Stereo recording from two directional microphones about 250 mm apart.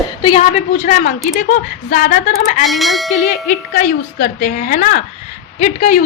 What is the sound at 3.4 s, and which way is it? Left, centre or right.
A man's voice, left.